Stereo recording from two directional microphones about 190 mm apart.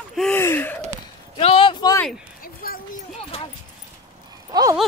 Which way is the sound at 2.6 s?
50° left (ahead or behind).